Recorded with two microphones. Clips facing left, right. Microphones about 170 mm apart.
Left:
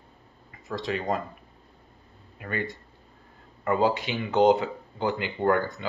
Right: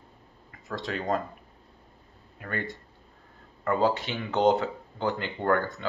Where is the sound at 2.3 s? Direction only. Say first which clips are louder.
Left 2 dB; 5° left (ahead or behind).